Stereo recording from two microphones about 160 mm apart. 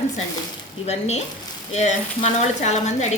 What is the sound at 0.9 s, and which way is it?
A woman's voice, 40° left (ahead or behind).